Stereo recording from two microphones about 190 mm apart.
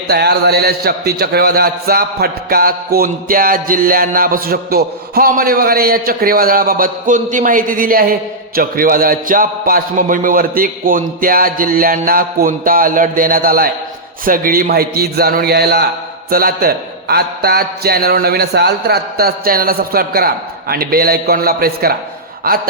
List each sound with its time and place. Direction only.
0.1 s a man's voice: 60° right (ahead or behind)